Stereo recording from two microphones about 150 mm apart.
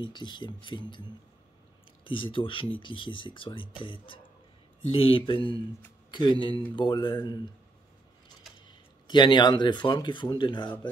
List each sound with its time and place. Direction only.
0.0 s speech: 30° left (ahead or behind)
2.0 s speech: 35° left (ahead or behind)
8.6 s speech: 30° left (ahead or behind)